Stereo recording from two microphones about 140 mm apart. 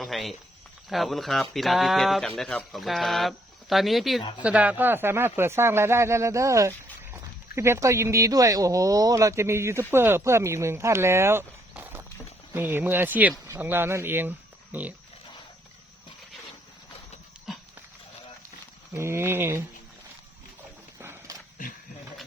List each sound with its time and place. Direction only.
0.0 s speech: centre (ahead or behind)
4.2 s speech: 35° left (ahead or behind)
4.4 s speech: 10° right (ahead or behind)
11.7 s clip-clop: 15° right (ahead or behind)
12.5 s speech: 15° right (ahead or behind)
18.9 s speech: 20° right (ahead or behind)
21.0 s horse: 15° right (ahead or behind)